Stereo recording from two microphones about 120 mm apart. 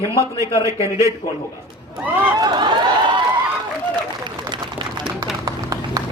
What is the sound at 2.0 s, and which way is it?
Speech, 15° right (ahead or behind).